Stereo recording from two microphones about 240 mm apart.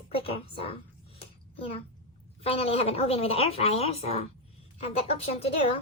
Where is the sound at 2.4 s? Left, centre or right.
Left.